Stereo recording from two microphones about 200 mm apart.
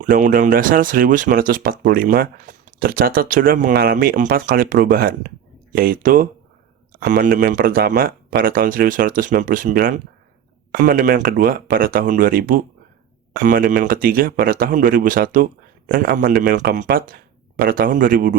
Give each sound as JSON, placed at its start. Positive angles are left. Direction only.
{"t": 0.0, "sound": "speech", "side_deg": -40}